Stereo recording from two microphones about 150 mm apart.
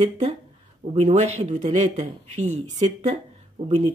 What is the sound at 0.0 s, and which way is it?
Speech, 50° right (ahead or behind).